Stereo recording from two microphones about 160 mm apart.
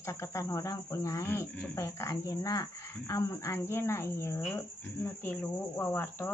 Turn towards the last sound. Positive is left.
turn(degrees=15)  # may be behind; listen again after turning